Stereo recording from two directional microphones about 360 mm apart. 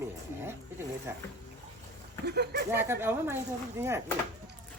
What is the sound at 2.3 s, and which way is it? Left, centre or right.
Speech, right.